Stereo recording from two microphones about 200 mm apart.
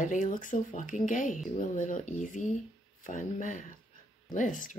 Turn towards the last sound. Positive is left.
turn(degrees=40)  # may be behind; listen again after turning